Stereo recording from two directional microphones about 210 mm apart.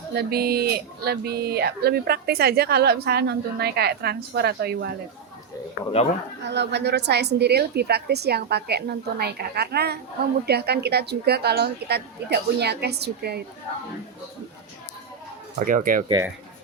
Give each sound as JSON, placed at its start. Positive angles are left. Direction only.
{"t": 0.1, "sound": "speech", "side_deg": -50}
{"t": 6.4, "sound": "speech", "side_deg": -55}
{"t": 15.5, "sound": "speech", "side_deg": -40}